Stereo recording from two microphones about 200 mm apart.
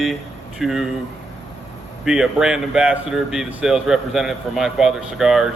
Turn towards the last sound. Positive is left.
turn(degrees=0)  # may be behind; listen again after turning